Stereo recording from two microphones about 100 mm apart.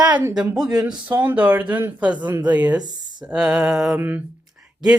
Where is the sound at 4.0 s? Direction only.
15° right (ahead or behind).